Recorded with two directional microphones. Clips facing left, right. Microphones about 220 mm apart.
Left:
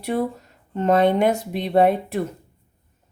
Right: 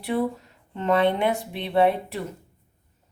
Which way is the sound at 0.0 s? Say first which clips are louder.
Left 1 dB; 45° left (ahead or behind).